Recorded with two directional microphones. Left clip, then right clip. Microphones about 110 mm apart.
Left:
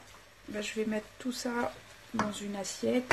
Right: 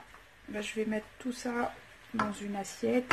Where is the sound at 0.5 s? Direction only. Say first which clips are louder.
Even; 10° left (ahead or behind).